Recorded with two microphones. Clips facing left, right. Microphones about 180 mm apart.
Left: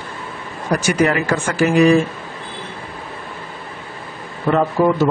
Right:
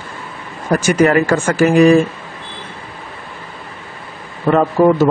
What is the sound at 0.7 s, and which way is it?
Speech, 50° right (ahead or behind).